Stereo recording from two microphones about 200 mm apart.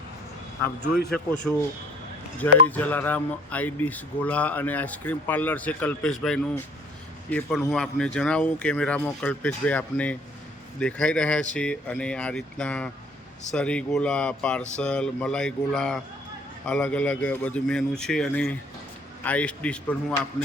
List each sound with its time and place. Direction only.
0.6 s a man's voice: 50° left (ahead or behind)
1.1 s speech: 5° left (ahead or behind)
2.6 s speech: 10° left (ahead or behind)